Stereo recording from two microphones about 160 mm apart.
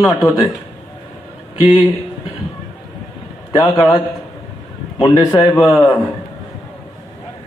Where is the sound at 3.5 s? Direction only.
25° left (ahead or behind).